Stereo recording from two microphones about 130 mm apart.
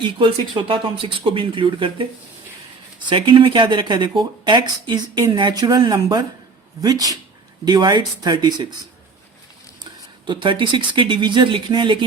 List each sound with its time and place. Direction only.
0.0 s speech: 40° right (ahead or behind)
10.2 s speech: 40° right (ahead or behind)